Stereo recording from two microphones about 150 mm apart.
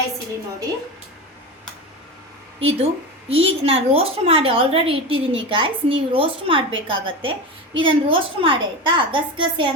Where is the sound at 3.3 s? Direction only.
40° right (ahead or behind).